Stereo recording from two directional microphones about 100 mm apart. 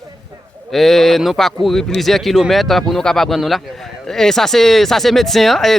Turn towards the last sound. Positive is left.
turn(degrees=0)  # may be behind; listen again after turning